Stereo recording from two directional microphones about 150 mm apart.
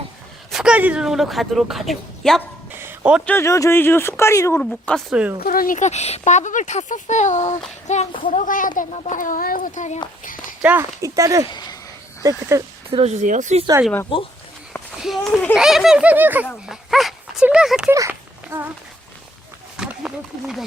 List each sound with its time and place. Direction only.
0.5 s a woman's voice: 5° right (ahead or behind)
2.7 s a sound: 10° right (ahead or behind)
3.2 s speech: 15° left (ahead or behind)
4.6 s a woman's voice: 5° left (ahead or behind)
5.4 s a child's voice: 70° left (ahead or behind); by 10.0 s 55° left (ahead or behind)
10.6 s speech: 10° right (ahead or behind)
11.0 s speech: 20° right (ahead or behind)
12.9 s speech: 45° right (ahead or behind)
15.0 s a woman's voice: centre (ahead or behind)
16.6 s speech: centre (ahead or behind)
17.8 s speech: 20° right (ahead or behind)
18.1 s a sound: 10° right (ahead or behind)
19.7 s a sound: 5° right (ahead or behind)